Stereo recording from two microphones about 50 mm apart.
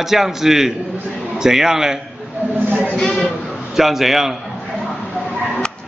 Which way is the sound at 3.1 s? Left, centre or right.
Centre.